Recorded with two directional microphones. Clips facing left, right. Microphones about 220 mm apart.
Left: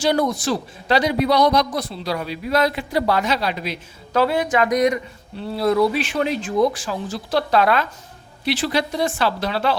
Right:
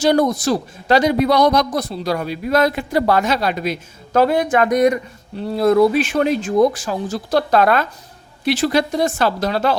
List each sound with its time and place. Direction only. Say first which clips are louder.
0.0 s speech: right 4 dB; 45° right (ahead or behind)